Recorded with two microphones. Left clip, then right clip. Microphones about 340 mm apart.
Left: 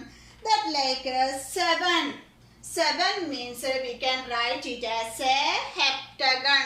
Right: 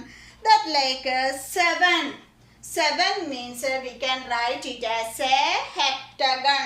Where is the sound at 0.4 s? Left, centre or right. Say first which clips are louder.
Right 5 dB; right.